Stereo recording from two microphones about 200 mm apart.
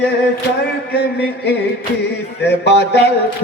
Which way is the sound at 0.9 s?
55° left (ahead or behind).